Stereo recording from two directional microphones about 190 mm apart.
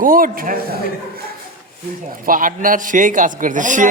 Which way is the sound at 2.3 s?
45° right (ahead or behind).